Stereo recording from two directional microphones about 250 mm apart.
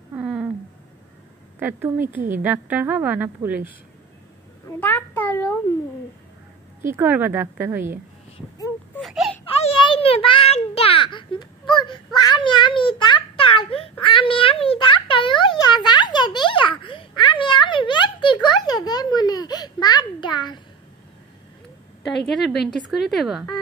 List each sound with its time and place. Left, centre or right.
0.1 s a sound: centre
1.6 s a woman's voice: centre
4.6 s a child's voice: centre
6.9 s a woman's voice: centre
9.0 s wail: centre
9.6 s a sound: left
22.3 s a woman's voice: centre